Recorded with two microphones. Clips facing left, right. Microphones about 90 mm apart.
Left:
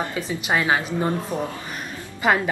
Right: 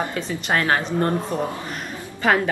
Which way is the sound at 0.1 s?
10° left (ahead or behind).